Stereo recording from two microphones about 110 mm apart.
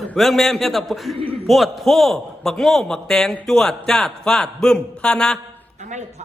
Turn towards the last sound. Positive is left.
turn(degrees=-90)